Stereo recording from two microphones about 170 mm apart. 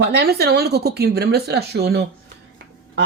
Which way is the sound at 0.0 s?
70° right (ahead or behind).